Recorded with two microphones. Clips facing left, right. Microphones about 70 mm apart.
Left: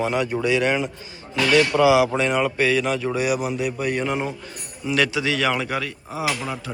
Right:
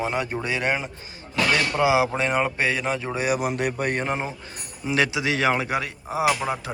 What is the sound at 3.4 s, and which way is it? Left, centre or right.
Speech, right.